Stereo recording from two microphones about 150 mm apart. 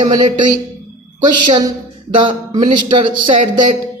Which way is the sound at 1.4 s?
30° right (ahead or behind).